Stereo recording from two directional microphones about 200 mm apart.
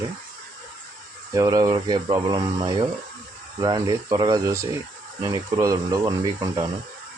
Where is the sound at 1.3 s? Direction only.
15° right (ahead or behind).